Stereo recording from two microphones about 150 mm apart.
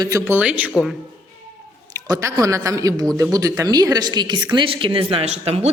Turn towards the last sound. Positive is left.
turn(degrees=-45)  # may be behind; listen again after turning